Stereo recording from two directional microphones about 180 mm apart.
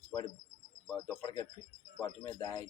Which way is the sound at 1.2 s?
25° left (ahead or behind).